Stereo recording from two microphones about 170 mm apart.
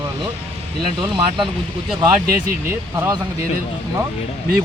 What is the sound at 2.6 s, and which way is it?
Speech, 15° right (ahead or behind).